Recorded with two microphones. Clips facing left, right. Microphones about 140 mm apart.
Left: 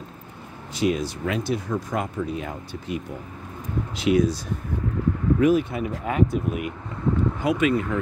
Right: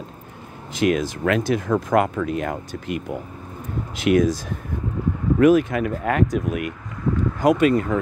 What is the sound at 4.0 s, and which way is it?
Speech, 60° right (ahead or behind).